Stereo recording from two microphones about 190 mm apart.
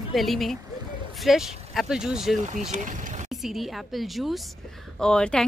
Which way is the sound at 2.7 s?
40° right (ahead or behind).